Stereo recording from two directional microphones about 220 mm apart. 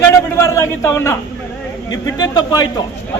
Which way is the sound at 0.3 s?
10° left (ahead or behind).